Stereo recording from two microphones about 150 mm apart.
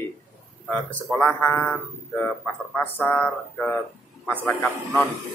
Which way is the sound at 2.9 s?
5° left (ahead or behind).